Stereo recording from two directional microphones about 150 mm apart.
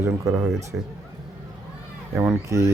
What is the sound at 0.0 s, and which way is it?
Speech, 20° right (ahead or behind).